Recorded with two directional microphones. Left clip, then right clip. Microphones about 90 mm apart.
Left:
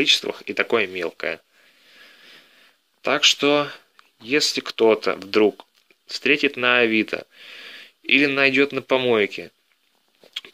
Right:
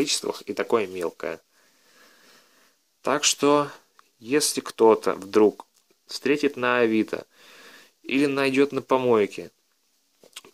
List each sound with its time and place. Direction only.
0.5 s speech: 25° right (ahead or behind)
3.0 s speech: 40° right (ahead or behind)